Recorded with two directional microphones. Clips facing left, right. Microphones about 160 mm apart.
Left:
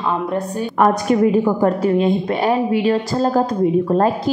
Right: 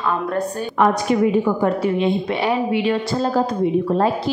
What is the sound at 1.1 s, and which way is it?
A woman's voice, 45° left (ahead or behind).